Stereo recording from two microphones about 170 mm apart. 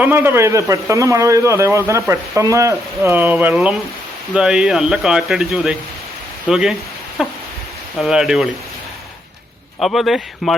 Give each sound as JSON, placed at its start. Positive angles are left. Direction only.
{"t": 0.0, "sound": "a man's voice", "side_deg": -15}
{"t": 9.8, "sound": "speech", "side_deg": 0}